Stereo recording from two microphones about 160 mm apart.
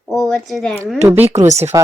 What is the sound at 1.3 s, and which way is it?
Speech, 45° right (ahead or behind).